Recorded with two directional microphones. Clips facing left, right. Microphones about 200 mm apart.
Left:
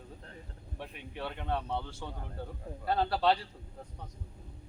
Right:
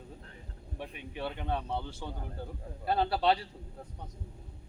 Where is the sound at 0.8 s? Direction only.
5° right (ahead or behind).